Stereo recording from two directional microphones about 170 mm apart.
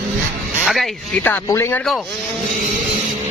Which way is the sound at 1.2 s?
15° left (ahead or behind).